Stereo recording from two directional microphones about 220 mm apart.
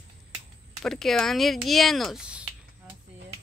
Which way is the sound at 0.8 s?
Centre (ahead or behind).